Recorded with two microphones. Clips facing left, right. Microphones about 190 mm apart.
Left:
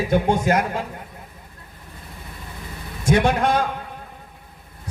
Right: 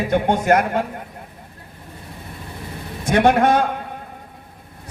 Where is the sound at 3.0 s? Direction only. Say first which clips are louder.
Right 3 dB; 60° right (ahead or behind).